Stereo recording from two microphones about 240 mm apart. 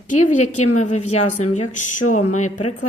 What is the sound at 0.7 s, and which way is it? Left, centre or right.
A woman's voice, left.